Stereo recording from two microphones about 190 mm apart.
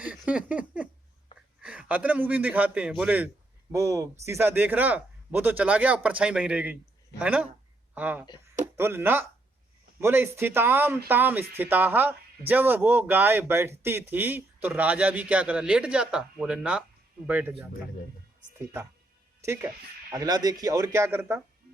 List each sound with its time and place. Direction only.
0.0 s a man's voice: 5° right (ahead or behind)
19.4 s speech: 15° right (ahead or behind)